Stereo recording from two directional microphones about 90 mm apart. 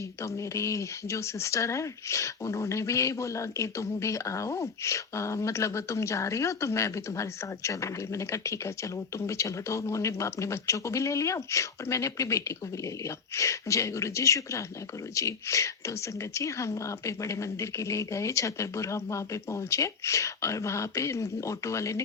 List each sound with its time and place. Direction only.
0.2 s speech: 35° left (ahead or behind)